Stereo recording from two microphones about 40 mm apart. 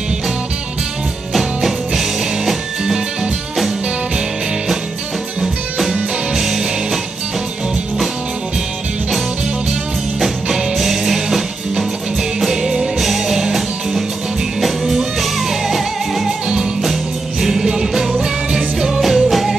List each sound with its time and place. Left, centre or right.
1.3 s music: centre
5.4 s music: centre
10.2 s music: centre
17.4 s music: centre